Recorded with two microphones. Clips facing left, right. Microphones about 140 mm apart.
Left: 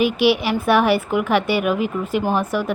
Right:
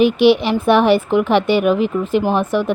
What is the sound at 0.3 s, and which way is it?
Speech, 25° right (ahead or behind).